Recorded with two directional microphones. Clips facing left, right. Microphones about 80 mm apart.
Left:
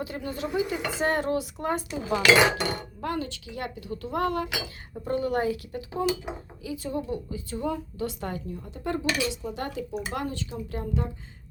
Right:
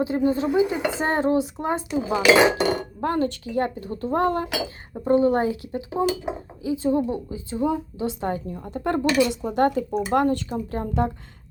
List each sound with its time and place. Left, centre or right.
0.0 s speech: right
2.5 s speech: right
8.5 s speech: right